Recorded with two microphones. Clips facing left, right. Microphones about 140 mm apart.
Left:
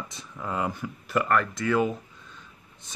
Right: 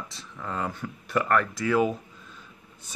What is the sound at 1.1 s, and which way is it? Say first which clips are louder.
Speech: even; centre (ahead or behind).